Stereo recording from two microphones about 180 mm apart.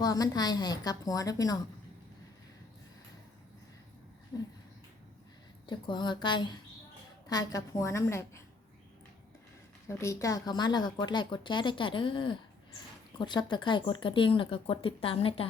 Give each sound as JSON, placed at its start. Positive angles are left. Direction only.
{"t": 0.0, "sound": "speech", "side_deg": 20}
{"t": 5.6, "sound": "a woman's voice", "side_deg": 25}
{"t": 10.0, "sound": "speech", "side_deg": 15}